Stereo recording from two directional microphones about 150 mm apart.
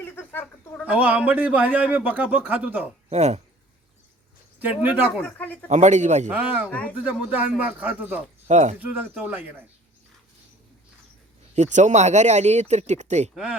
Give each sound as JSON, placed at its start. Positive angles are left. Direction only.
{"t": 0.2, "sound": "a sound", "side_deg": 15}
{"t": 0.9, "sound": "a man's voice", "side_deg": -10}
{"t": 3.1, "sound": "speech", "side_deg": -50}
{"t": 4.6, "sound": "a man's voice", "side_deg": -10}
{"t": 5.2, "sound": "speech", "side_deg": 10}
{"t": 5.6, "sound": "speech", "side_deg": -50}
{"t": 6.3, "sound": "a man's voice", "side_deg": -10}
{"t": 6.7, "sound": "speech", "side_deg": 10}
{"t": 6.9, "sound": "a man's voice", "side_deg": -10}
{"t": 8.4, "sound": "speech", "side_deg": -50}
{"t": 8.8, "sound": "a man's voice", "side_deg": -10}
{"t": 11.5, "sound": "speech", "side_deg": -50}
{"t": 13.3, "sound": "a man's voice", "side_deg": -5}